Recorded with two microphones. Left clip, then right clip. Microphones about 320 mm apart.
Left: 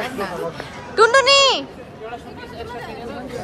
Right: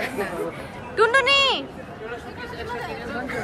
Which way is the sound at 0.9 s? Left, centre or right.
Centre.